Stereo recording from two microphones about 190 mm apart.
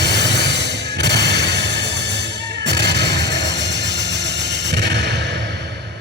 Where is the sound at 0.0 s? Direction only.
65° right (ahead or behind).